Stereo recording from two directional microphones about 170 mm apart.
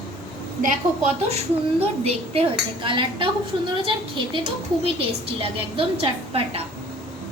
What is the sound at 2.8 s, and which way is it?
A woman's voice, 30° right (ahead or behind).